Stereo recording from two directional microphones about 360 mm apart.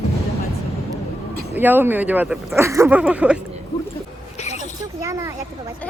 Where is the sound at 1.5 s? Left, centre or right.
Centre.